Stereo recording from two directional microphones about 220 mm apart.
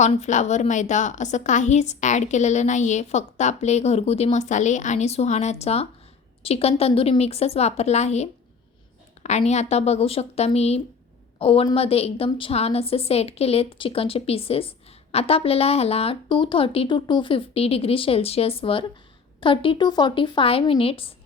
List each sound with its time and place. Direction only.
0.0 s a woman's voice: 30° left (ahead or behind)
9.2 s a sound: 30° left (ahead or behind)
9.5 s speech: 30° left (ahead or behind)